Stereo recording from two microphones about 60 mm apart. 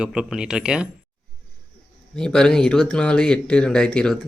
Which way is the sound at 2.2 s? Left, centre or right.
Centre.